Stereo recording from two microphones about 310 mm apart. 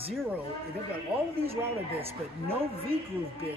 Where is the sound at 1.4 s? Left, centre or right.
Centre.